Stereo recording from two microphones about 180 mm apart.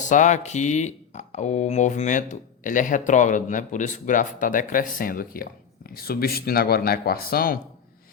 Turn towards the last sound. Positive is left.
turn(degrees=55)  # may be behind; listen again after turning